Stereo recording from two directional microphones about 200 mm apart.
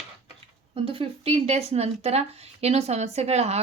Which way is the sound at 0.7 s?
25° right (ahead or behind).